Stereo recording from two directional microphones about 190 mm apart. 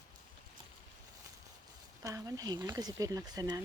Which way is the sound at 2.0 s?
20° right (ahead or behind).